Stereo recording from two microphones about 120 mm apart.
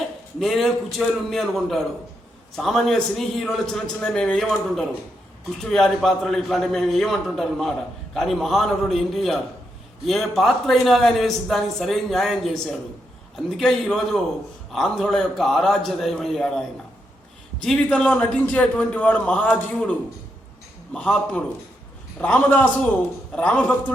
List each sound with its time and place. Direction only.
0.3 s a man's voice: centre (ahead or behind)